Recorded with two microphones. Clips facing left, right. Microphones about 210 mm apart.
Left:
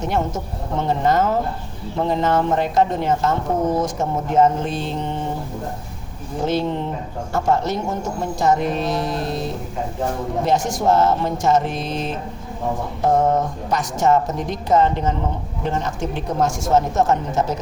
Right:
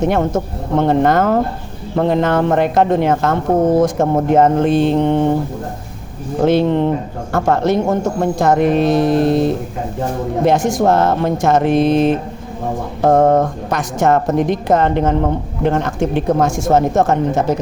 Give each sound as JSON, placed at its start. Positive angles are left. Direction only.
{"t": 0.0, "sound": "a woman's voice", "side_deg": -60}
{"t": 6.4, "sound": "a woman's voice", "side_deg": -60}